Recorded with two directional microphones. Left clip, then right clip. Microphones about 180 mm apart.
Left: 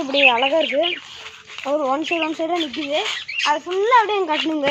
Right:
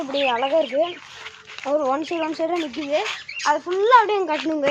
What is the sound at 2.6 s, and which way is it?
Speech, 15° left (ahead or behind).